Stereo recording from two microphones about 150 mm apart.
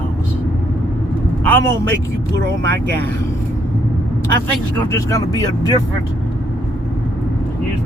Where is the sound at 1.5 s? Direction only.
15° left (ahead or behind).